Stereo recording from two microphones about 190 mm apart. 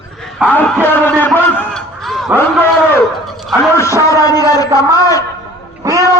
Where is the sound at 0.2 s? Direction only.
Centre (ahead or behind).